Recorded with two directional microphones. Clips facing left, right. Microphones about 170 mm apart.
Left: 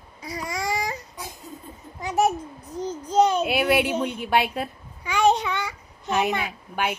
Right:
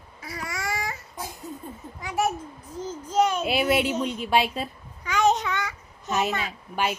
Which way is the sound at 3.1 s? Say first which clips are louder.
Left 3 dB; 30° left (ahead or behind).